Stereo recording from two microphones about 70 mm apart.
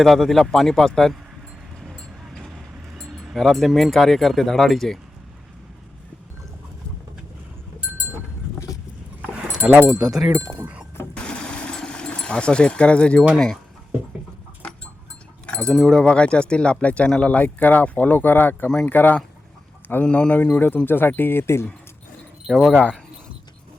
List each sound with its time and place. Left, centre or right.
0.0 s speech: centre
1.9 s vehicle: centre
3.1 s keys jangling: centre
3.3 s speech: centre
8.5 s clip-clop: left
9.2 s dog: centre
11.1 s a sound: centre
13.3 s speech: centre
15.4 s sheep: centre
15.9 s speech: centre; by 21.7 s left
22.4 s speech: centre
22.7 s speech: centre